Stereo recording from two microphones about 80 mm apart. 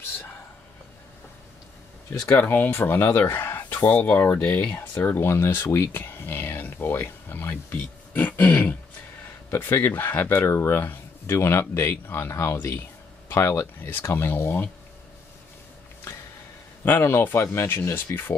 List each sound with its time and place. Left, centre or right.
2.3 s speech: left
16.8 s speech: left